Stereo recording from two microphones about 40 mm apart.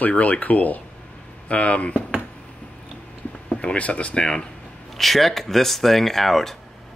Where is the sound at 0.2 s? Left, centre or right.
Left.